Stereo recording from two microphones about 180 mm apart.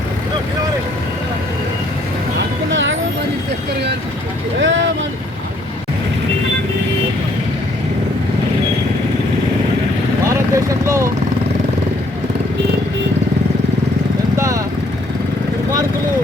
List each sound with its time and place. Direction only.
4.6 s vehicle: 90° right
10.2 s vehicle: 15° right (ahead or behind)
14.3 s vehicle: 15° right (ahead or behind)